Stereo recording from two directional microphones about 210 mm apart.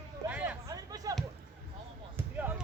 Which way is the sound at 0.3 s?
5° right (ahead or behind).